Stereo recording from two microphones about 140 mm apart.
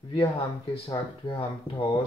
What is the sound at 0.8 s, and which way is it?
Speech, 35° left (ahead or behind).